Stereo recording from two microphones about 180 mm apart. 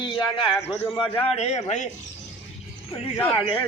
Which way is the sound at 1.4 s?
40° left (ahead or behind).